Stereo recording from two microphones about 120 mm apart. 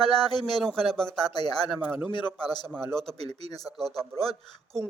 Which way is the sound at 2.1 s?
40° left (ahead or behind).